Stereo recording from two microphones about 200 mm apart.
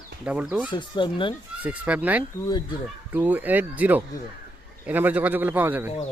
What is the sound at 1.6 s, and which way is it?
A man's voice, 5° right (ahead or behind).